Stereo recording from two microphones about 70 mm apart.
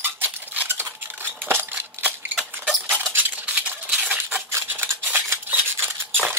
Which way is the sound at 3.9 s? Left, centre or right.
Centre.